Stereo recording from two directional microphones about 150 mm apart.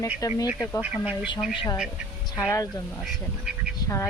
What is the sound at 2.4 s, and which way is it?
Speech, 20° left (ahead or behind).